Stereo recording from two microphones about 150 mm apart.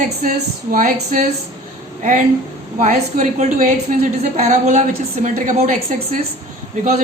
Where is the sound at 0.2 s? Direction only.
65° right (ahead or behind).